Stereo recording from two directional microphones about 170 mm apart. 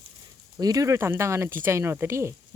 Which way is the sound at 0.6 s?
20° right (ahead or behind).